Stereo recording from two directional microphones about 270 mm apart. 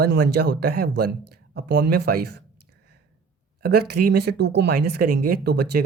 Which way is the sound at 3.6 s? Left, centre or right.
Right.